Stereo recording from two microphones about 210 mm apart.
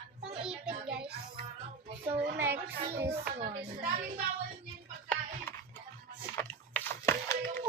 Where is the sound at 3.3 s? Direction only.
35° right (ahead or behind).